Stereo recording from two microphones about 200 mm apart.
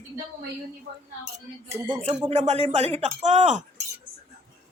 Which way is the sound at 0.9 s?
50° right (ahead or behind).